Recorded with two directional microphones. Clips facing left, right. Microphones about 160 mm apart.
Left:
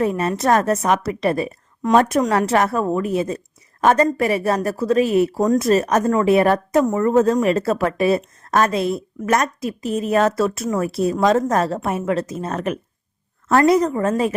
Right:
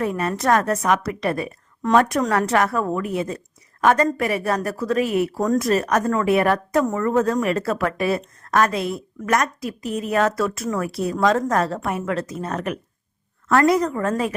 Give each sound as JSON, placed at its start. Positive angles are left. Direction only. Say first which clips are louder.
{"t": 0.0, "sound": "a woman's voice", "louder": "left 3 dB", "side_deg": 25}
{"t": 6.8, "sound": "speech", "louder": "left 4 dB", "side_deg": 15}
{"t": 7.2, "sound": "a woman's voice", "louder": "left 4 dB", "side_deg": 25}